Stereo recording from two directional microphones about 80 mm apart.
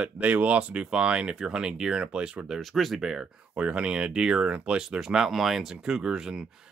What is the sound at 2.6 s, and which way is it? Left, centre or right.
Speech, centre.